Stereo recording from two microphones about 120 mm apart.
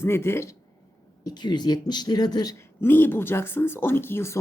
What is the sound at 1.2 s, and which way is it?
Speech, 35° left (ahead or behind).